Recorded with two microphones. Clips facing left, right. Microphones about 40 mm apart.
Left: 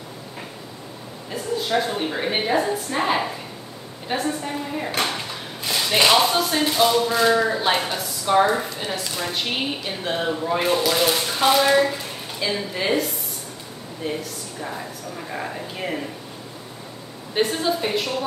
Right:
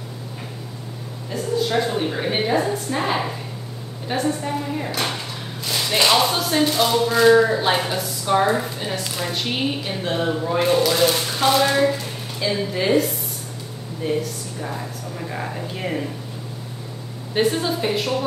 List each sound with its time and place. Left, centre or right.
1.3 s a woman's voice: centre
17.3 s speech: centre